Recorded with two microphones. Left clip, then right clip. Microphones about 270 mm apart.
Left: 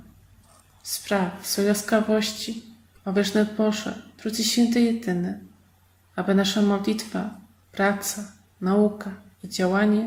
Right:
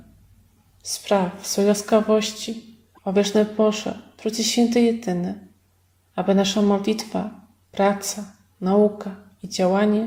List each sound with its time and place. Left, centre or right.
0.8 s speech: centre
6.1 s speech: centre